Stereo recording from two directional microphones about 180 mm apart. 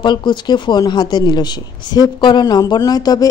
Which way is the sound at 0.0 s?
25° left (ahead or behind).